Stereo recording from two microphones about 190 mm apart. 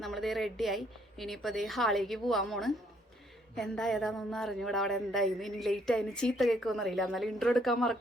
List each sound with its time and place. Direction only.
0.0 s speech: centre (ahead or behind)